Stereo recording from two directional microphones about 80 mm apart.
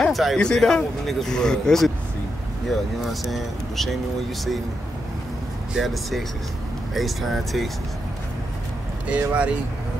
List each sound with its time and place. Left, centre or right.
0.0 s a sound: centre
0.4 s speech: centre
5.8 s speech: centre
9.1 s speech: centre